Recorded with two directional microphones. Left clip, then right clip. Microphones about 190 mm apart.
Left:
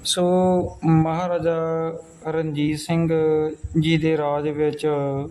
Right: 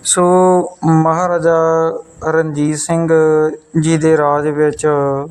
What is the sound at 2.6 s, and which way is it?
Speech, 80° right.